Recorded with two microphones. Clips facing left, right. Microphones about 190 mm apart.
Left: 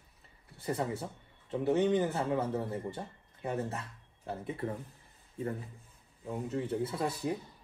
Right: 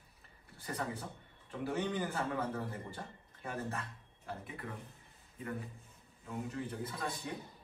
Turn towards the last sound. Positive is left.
turn(degrees=30)  # may be behind; listen again after turning